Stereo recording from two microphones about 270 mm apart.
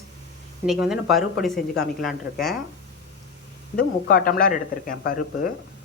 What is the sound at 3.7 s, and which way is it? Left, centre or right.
Speech, left.